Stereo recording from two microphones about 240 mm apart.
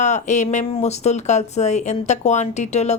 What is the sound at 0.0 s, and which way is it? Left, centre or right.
Speech, left.